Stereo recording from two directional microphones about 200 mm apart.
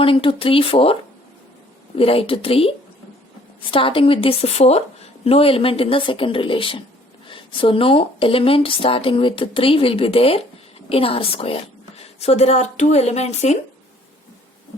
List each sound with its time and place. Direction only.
0.0 s a woman's voice: 25° left (ahead or behind)
2.0 s a woman's voice: 30° left (ahead or behind)